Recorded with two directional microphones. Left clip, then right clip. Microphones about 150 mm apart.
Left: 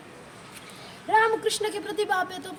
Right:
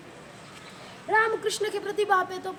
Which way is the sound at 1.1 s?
15° right (ahead or behind).